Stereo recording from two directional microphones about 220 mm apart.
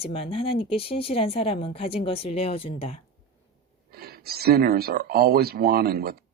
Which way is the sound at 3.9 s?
45° right (ahead or behind).